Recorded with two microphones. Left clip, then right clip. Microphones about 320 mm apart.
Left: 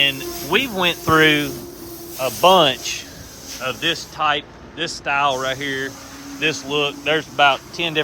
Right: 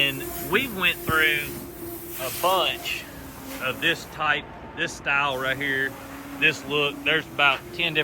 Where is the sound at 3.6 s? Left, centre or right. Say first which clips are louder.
Left 3 dB; centre.